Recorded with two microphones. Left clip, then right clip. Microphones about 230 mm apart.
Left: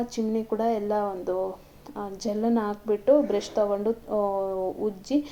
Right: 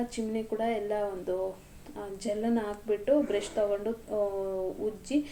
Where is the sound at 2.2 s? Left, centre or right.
Left.